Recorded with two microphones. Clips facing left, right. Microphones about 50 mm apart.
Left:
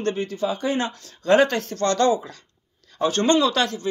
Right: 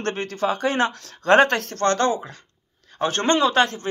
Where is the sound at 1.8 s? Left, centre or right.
Right.